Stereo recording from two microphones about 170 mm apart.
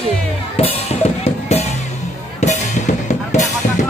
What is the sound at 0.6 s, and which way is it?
Drum kit, 35° left (ahead or behind).